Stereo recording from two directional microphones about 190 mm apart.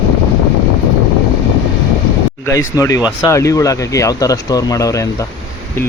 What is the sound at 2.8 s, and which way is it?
Speech, 15° left (ahead or behind).